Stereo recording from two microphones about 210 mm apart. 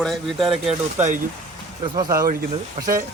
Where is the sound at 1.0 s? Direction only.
35° right (ahead or behind).